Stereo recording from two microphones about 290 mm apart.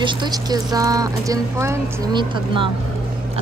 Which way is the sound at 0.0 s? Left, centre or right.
Centre.